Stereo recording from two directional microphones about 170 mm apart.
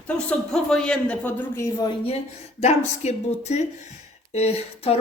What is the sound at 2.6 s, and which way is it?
Speech, 40° left (ahead or behind).